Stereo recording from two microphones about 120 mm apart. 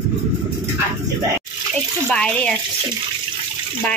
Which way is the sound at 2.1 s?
10° left (ahead or behind).